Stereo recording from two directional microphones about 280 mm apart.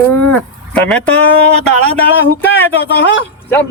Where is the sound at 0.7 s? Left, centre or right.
Centre.